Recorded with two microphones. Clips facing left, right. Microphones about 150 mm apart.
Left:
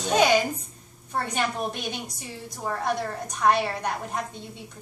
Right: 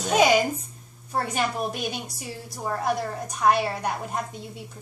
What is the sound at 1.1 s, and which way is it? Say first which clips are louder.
A woman's voice: right 1 dB; 5° right (ahead or behind).